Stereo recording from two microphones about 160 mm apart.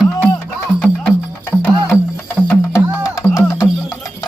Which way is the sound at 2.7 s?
20° left (ahead or behind).